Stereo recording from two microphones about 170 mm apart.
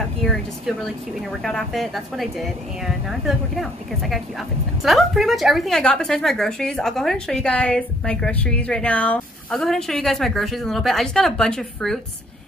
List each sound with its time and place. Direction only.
0.2 s a woman's voice: centre (ahead or behind)